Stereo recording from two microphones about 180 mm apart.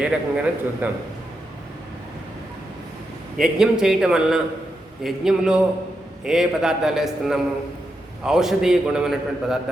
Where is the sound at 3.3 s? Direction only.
5° right (ahead or behind).